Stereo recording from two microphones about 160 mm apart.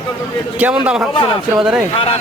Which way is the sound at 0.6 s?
5° right (ahead or behind).